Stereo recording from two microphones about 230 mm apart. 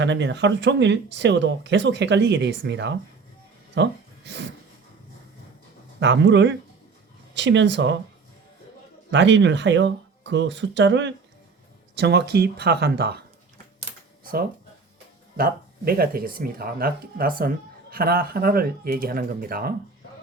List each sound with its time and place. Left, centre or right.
0.0 s speech: right
6.0 s speech: right
9.1 s speech: right
15.4 s speech: right